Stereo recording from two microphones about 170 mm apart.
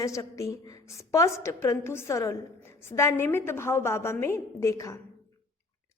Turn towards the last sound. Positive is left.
turn(degrees=20)  # may be behind; listen again after turning